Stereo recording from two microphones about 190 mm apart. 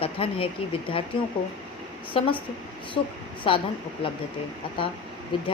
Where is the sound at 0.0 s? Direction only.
30° left (ahead or behind).